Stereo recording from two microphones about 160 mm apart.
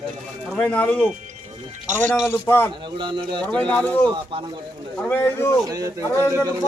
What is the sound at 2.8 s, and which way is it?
Speech, 30° right (ahead or behind).